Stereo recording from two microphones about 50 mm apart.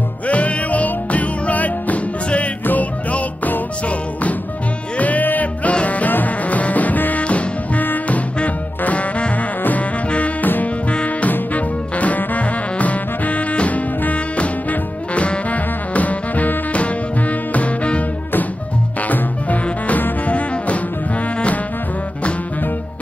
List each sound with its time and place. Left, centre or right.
0.3 s music: left
4.9 s music: left
7.8 s music: left
8.4 s music: left